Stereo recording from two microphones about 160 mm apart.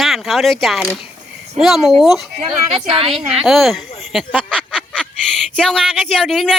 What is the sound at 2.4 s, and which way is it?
Speech, 35° right (ahead or behind).